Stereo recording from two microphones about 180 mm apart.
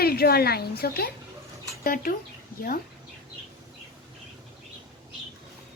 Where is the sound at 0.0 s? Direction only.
60° left (ahead or behind).